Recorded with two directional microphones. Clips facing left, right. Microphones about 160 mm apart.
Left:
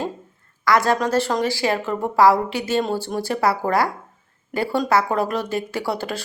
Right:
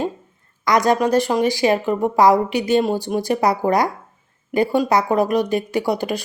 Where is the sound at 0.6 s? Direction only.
20° right (ahead or behind).